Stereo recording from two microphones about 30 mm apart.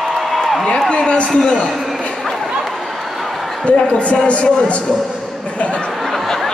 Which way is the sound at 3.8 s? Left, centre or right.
Left.